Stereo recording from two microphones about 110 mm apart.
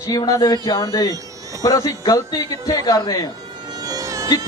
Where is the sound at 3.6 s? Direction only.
35° right (ahead or behind).